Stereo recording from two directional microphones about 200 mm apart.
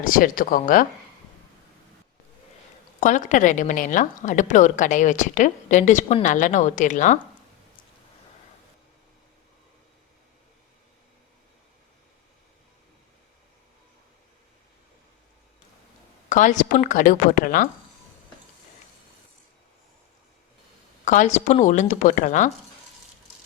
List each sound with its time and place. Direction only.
0.0 s speech: 45° left (ahead or behind)
3.0 s a woman's voice: 40° left (ahead or behind)
16.3 s a woman's voice: 40° left (ahead or behind)
21.0 s a woman's voice: 40° left (ahead or behind)